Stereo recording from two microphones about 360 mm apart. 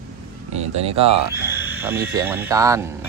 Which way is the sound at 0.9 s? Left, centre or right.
Centre.